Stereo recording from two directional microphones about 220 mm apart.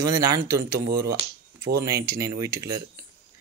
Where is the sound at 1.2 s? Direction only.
25° right (ahead or behind).